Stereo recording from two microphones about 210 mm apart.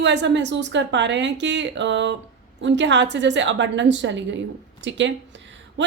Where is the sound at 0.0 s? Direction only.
55° right (ahead or behind).